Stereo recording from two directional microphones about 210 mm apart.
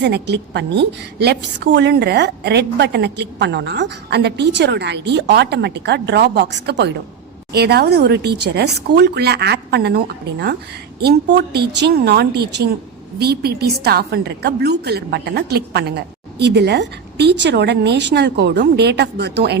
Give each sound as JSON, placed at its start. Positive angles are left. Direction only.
{"t": 0.0, "sound": "a woman's voice", "side_deg": -55}